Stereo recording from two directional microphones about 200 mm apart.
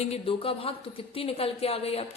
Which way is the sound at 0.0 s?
30° left (ahead or behind).